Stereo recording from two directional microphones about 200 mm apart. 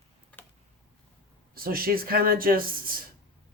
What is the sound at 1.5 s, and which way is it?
Speech, 45° right (ahead or behind).